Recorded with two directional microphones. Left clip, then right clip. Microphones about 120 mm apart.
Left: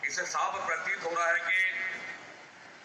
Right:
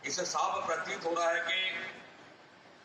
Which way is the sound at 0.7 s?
25° right (ahead or behind).